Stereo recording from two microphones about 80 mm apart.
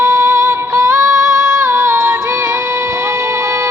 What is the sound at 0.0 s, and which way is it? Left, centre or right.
Music, right.